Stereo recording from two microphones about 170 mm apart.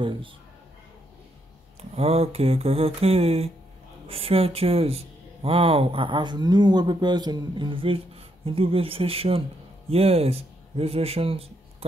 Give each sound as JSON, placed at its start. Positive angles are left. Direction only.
{"t": 1.8, "sound": "speech", "side_deg": -35}